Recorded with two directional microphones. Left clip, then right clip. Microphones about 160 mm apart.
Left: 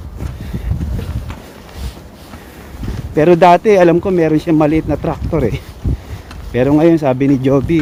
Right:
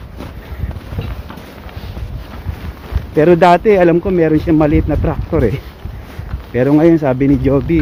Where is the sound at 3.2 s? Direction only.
25° left (ahead or behind).